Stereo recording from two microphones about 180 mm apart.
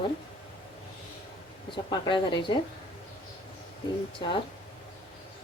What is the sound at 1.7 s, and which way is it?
Speech, 25° left (ahead or behind).